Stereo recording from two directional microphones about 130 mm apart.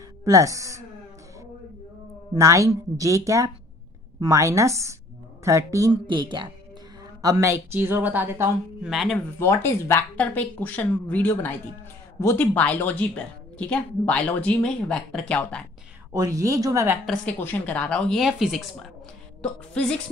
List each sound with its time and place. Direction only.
0.2 s a woman's voice: 25° right (ahead or behind)
2.3 s a woman's voice: 25° right (ahead or behind)
6.0 s a woman's voice: 35° right (ahead or behind); by 8.5 s 15° right (ahead or behind)
8.8 s a woman's voice: centre (ahead or behind)
9.4 s a woman's voice: 20° left (ahead or behind)
16.1 s a woman's voice: 25° right (ahead or behind)
17.0 s a woman's voice: 5° left (ahead or behind)